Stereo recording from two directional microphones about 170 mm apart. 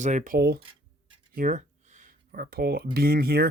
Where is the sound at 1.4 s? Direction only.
45° right (ahead or behind).